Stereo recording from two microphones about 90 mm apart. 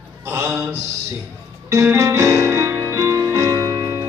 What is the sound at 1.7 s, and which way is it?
Music, 35° right (ahead or behind).